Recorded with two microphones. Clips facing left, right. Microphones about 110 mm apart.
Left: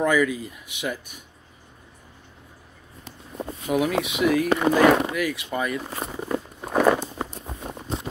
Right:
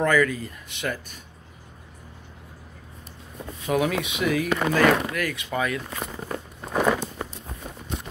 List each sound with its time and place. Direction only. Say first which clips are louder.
0.0 s speech: even; 10° left (ahead or behind)
3.6 s speech: left 1 dB; 5° left (ahead or behind)
4.6 s speech: left 2 dB; 15° left (ahead or behind)
5.8 s speech: left 2 dB; 30° left (ahead or behind)
6.1 s a sound: left 5 dB; 15° left (ahead or behind)
7.4 s a sound: left 4 dB; 25° left (ahead or behind)